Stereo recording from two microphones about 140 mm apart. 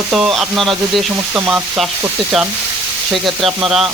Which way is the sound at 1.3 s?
10° right (ahead or behind).